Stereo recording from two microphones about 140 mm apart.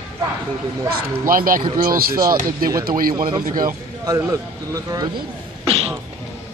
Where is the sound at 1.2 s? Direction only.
85° right.